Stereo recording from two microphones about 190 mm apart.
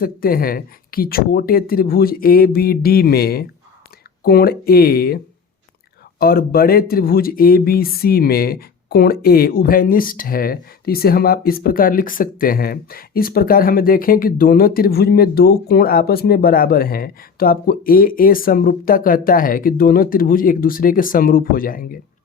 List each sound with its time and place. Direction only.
0.0 s speech: 50° left (ahead or behind)